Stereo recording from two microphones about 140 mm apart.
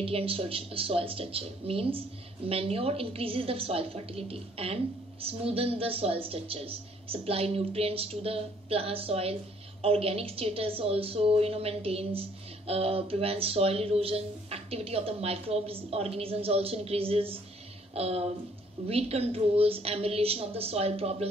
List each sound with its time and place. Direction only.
0.0 s a woman's voice: 40° right (ahead or behind)